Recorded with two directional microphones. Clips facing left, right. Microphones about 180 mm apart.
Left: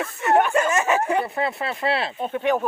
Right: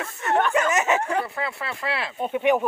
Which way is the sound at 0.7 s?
20° right (ahead or behind).